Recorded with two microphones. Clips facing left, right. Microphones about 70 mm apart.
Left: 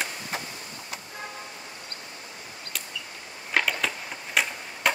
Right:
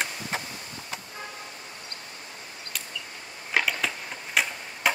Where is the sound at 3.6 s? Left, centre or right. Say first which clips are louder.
Even; centre.